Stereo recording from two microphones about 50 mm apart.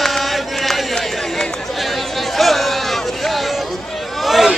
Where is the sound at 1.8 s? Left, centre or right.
Centre.